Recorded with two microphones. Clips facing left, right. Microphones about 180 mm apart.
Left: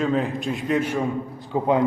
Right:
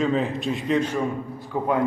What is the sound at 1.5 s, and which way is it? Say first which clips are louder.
Speech: left 3 dB; 25° left (ahead or behind).